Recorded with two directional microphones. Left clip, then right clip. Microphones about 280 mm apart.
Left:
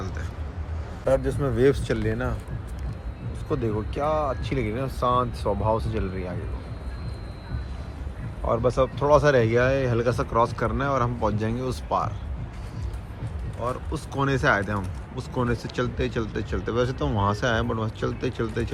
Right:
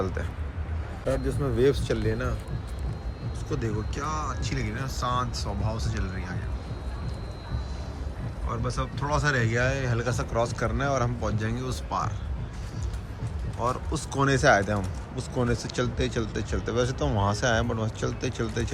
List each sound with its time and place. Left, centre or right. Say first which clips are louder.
0.0 s a sound: right 6 dB; centre
1.4 s speech: left 2 dB; left
3.5 s speech: left 5 dB; centre
8.4 s speech: left 10 dB; centre
13.6 s speech: right 1 dB; centre